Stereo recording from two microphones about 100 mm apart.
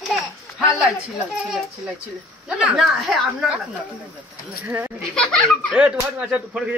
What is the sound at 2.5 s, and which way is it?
A woman's voice, 5° right (ahead or behind).